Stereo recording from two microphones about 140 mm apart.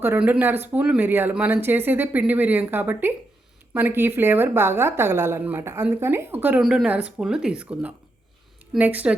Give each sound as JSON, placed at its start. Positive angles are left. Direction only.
{"t": 0.0, "sound": "speech", "side_deg": -15}
{"t": 6.6, "sound": "speech", "side_deg": -5}